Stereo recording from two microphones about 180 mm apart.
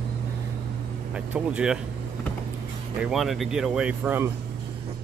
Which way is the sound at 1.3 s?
5° right (ahead or behind).